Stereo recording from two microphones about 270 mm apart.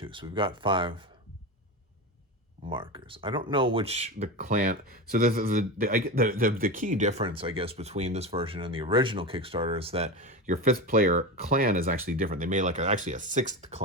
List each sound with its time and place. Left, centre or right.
0.0 s speech: centre
2.6 s speech: centre